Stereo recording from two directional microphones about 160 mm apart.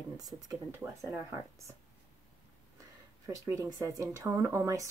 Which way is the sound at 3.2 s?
20° right (ahead or behind).